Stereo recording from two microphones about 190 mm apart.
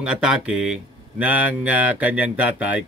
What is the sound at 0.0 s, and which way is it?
Speech, 5° right (ahead or behind).